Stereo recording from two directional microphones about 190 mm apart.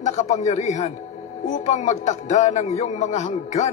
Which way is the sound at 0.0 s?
35° left (ahead or behind).